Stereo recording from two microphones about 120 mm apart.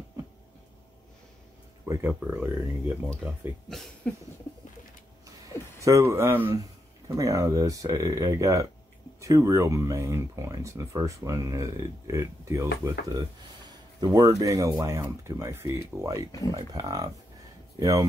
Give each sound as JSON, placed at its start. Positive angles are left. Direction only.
{"t": 1.9, "sound": "speech", "side_deg": -20}
{"t": 3.6, "sound": "speech", "side_deg": 5}
{"t": 5.8, "sound": "speech", "side_deg": -25}